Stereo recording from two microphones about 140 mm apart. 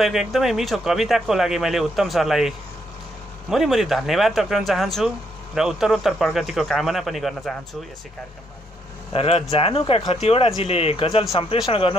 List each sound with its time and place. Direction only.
0.0 s speech: centre (ahead or behind)
9.1 s speech: 45° left (ahead or behind)